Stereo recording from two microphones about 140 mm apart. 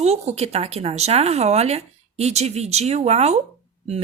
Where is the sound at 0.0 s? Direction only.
50° right (ahead or behind).